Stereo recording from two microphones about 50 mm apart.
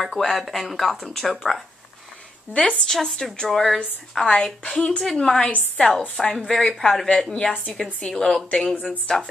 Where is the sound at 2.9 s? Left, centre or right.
Centre.